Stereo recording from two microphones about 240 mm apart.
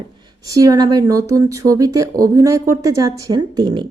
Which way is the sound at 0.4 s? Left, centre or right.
Centre.